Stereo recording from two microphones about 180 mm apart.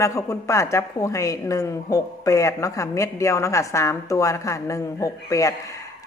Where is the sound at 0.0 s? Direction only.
15° left (ahead or behind).